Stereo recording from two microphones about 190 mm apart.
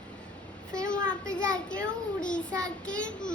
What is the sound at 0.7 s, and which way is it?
A child's voice, 5° left (ahead or behind).